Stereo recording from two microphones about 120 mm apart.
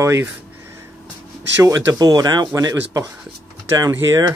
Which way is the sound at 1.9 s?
30° right (ahead or behind).